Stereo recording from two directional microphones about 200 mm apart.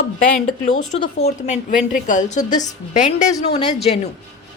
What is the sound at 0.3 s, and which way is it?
Speech, 35° left (ahead or behind).